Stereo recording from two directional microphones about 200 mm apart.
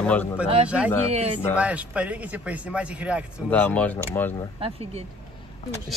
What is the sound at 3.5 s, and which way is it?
Speech, 5° left (ahead or behind).